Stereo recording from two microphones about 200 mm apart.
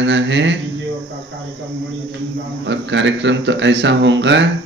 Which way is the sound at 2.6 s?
65° right (ahead or behind).